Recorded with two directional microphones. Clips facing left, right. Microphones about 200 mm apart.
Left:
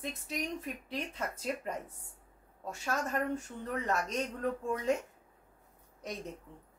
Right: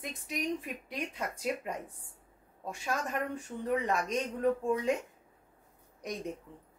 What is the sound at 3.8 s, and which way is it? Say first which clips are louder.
Speech: right 2 dB; 15° right (ahead or behind).